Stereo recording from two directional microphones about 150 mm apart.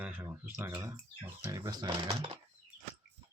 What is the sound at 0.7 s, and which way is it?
Speech, 25° right (ahead or behind).